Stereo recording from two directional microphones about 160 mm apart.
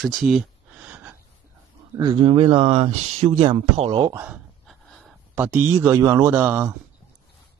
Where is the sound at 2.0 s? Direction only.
30° right (ahead or behind).